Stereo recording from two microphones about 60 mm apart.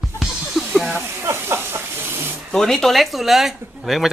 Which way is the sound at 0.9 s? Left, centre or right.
Right.